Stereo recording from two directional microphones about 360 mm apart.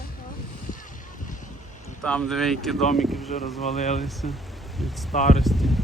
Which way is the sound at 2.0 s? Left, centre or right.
Centre.